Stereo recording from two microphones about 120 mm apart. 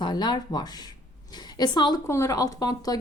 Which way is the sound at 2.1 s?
25° left (ahead or behind).